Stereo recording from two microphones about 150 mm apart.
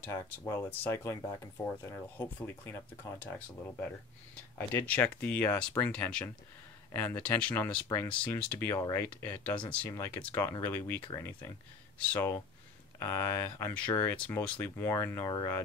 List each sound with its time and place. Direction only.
0.0 s speech: 15° left (ahead or behind)